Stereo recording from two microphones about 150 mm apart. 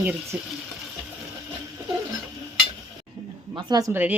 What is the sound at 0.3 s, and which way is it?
Speech, 5° right (ahead or behind).